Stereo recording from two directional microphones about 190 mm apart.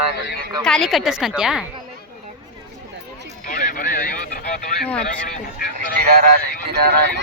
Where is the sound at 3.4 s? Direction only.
45° left (ahead or behind).